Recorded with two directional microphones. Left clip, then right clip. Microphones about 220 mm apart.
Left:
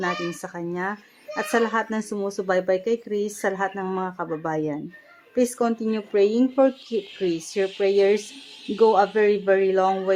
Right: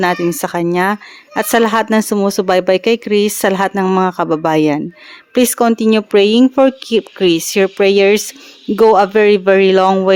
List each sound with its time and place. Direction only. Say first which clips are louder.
0.0 s speech: right 12 dB; 40° right (ahead or behind)